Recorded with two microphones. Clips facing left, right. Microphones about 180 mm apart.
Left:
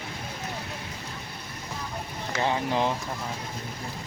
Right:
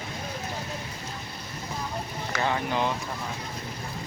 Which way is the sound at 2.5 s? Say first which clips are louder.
Left 2 dB; 30° left (ahead or behind).